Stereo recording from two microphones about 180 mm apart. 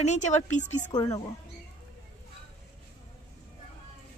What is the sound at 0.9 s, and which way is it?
Speech, 20° left (ahead or behind).